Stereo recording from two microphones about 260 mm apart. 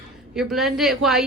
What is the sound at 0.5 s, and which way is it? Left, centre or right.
Speech, centre.